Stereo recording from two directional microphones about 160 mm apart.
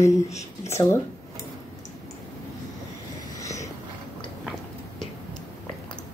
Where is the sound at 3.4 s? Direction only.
20° left (ahead or behind).